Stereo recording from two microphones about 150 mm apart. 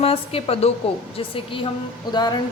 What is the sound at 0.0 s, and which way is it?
A woman's voice, 40° left (ahead or behind).